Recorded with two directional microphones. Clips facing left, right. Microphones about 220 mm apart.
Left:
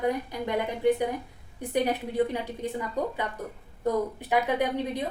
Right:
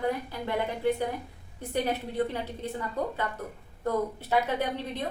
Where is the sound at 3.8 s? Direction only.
15° left (ahead or behind).